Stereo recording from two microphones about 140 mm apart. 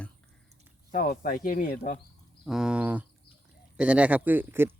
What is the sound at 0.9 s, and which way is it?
Speech, 90° left.